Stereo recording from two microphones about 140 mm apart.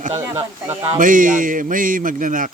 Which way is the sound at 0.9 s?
75° right (ahead or behind).